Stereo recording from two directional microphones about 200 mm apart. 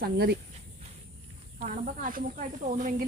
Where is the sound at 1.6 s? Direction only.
40° right (ahead or behind).